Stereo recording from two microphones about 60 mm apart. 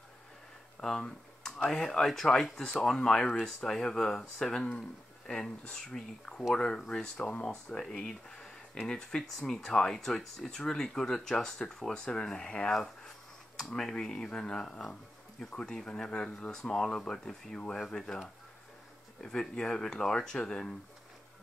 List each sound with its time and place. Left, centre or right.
0.7 s a sound: centre
1.7 s speech: centre
16.5 s speech: centre
19.2 s speech: centre